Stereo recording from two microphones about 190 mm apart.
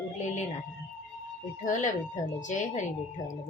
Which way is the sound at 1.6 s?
40° left (ahead or behind).